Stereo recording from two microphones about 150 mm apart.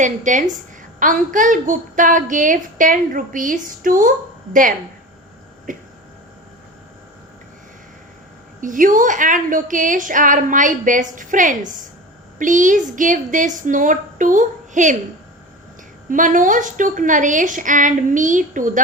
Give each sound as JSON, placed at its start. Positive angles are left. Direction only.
{"t": 0.0, "sound": "a woman's voice", "side_deg": -55}
{"t": 5.7, "sound": "a woman's voice", "side_deg": -60}
{"t": 8.6, "sound": "a woman's voice", "side_deg": -60}
{"t": 16.0, "sound": "a woman's voice", "side_deg": -60}